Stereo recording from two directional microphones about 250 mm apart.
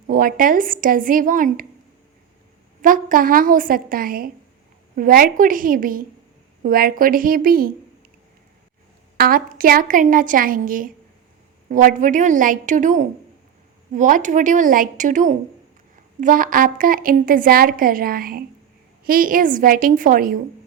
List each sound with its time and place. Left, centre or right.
0.1 s a woman's voice: right
2.8 s a woman's voice: right
9.1 s a woman's voice: right